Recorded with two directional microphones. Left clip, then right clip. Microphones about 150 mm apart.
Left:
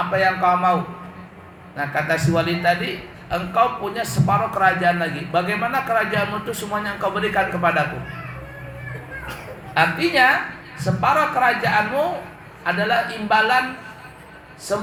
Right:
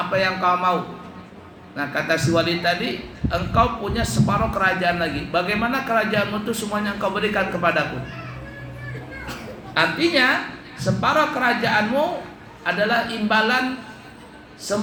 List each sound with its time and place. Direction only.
0.1 s a man's voice: 30° right (ahead or behind)
1.7 s a man's voice: 25° right (ahead or behind)
9.7 s a man's voice: 25° right (ahead or behind)
14.7 s speech: 30° right (ahead or behind)